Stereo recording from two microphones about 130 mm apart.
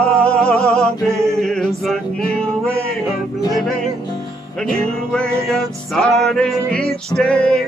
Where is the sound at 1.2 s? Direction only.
5° left (ahead or behind).